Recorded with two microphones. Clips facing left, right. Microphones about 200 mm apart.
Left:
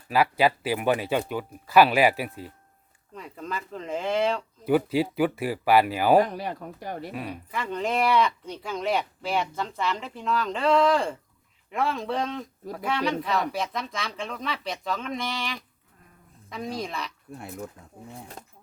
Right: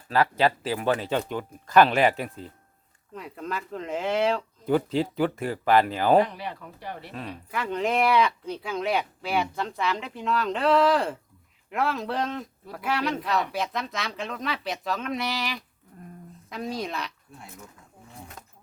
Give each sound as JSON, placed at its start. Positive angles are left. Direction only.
{"t": 0.1, "sound": "speech", "side_deg": 10}
{"t": 4.6, "sound": "speech", "side_deg": 10}
{"t": 6.2, "sound": "speech", "side_deg": 45}
{"t": 7.1, "sound": "speech", "side_deg": 10}
{"t": 7.5, "sound": "speech", "side_deg": 0}
{"t": 15.9, "sound": "a sound", "side_deg": -45}
{"t": 16.5, "sound": "speech", "side_deg": 0}